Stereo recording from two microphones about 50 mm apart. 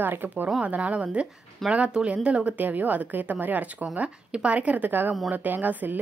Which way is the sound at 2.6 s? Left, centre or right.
Right.